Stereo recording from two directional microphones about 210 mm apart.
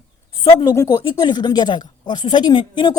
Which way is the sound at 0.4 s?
15° left (ahead or behind).